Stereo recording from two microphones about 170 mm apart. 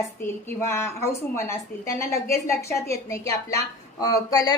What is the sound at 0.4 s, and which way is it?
A woman's voice, 15° left (ahead or behind).